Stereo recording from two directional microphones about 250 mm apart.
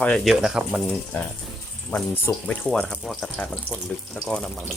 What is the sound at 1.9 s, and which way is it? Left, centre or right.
Speech, centre.